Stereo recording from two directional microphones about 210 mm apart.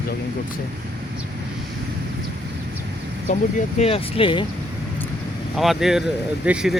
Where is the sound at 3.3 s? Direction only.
35° left (ahead or behind).